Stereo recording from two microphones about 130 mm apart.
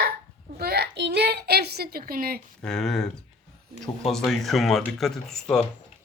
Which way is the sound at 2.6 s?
5° left (ahead or behind).